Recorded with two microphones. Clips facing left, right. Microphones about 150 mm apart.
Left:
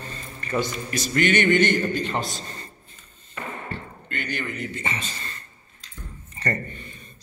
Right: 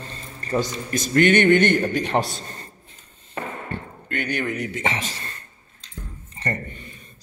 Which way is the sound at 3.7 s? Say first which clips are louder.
Right 3 dB; 55° right (ahead or behind).